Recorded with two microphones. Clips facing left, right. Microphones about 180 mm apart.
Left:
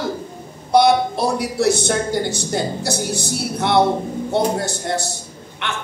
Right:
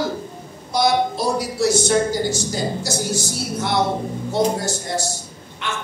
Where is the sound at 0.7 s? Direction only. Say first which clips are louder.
Left 4 dB; 60° left (ahead or behind).